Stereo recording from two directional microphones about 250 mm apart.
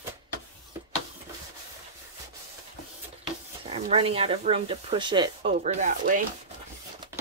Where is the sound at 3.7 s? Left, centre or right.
Right.